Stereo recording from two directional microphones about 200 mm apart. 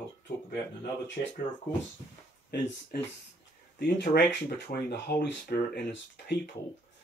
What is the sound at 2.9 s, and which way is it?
Speech, 50° left (ahead or behind).